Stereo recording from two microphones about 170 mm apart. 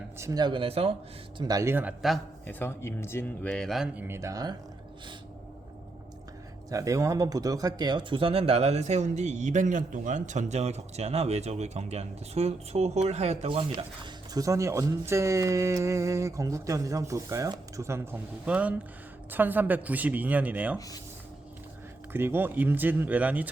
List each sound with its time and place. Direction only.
0.2 s speech: 20° right (ahead or behind)
1.4 s speech: 20° right (ahead or behind); by 2.2 s centre (ahead or behind)
2.5 s speech: 10° left (ahead or behind)
4.0 s speech: 15° right (ahead or behind)
6.7 s speech: 20° right (ahead or behind)
20.7 s speech: 20° left (ahead or behind)
22.1 s speech: 15° right (ahead or behind)